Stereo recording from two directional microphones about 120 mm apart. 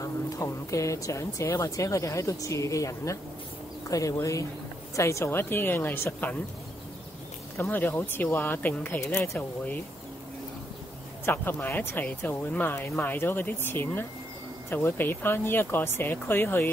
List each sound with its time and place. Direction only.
0.0 s speech: 25° left (ahead or behind)
7.5 s speech: 15° left (ahead or behind)
11.2 s speech: 15° left (ahead or behind)